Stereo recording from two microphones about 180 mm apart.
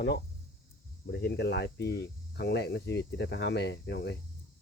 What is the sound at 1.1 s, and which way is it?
Speech, 70° left (ahead or behind).